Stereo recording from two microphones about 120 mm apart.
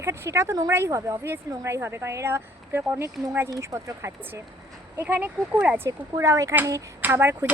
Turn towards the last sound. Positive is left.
turn(degrees=-20)  # may be behind; listen again after turning